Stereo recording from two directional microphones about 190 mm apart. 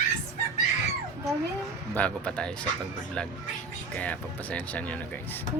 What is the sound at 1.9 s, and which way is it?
Speech, 5° left (ahead or behind).